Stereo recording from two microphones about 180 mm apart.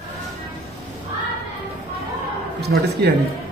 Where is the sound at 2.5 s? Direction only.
65° right (ahead or behind).